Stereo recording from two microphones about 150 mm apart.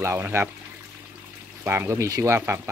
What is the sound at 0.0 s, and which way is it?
Speech, 15° right (ahead or behind).